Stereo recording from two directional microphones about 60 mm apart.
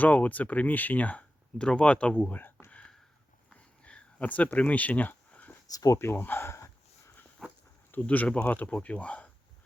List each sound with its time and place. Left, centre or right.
0.0 s speech: left
2.6 s whispering: left
3.5 s a sound: centre
5.7 s speech: left
6.0 s speech: left
7.4 s insect: centre
8.0 s speech: left